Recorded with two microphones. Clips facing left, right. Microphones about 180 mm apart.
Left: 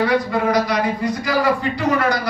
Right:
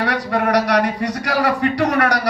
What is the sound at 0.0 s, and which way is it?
A man's voice, 65° right (ahead or behind).